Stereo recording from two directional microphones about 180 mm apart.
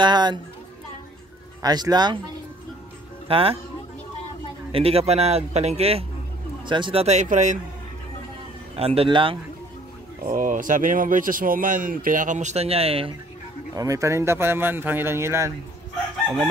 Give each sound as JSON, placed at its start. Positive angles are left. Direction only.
{"t": 0.0, "sound": "speech", "side_deg": -25}
{"t": 1.6, "sound": "speech", "side_deg": -20}
{"t": 3.3, "sound": "speech", "side_deg": -30}
{"t": 4.7, "sound": "a man's voice", "side_deg": -35}
{"t": 8.7, "sound": "a man's voice", "side_deg": -30}
{"t": 10.2, "sound": "speech", "side_deg": -45}
{"t": 13.7, "sound": "speech", "side_deg": -20}